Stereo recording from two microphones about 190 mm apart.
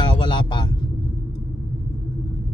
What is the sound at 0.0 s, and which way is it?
Vehicle, 25° left (ahead or behind).